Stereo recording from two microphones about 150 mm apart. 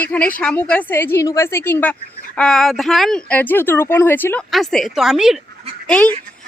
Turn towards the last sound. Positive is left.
turn(degrees=5)  # may be behind; listen again after turning